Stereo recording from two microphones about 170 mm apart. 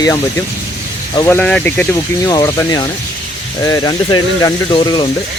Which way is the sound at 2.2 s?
25° left (ahead or behind).